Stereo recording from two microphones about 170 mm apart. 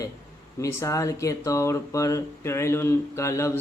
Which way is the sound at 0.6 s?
20° left (ahead or behind).